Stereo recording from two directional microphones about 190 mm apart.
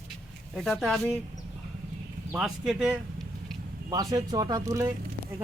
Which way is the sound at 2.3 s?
5° right (ahead or behind).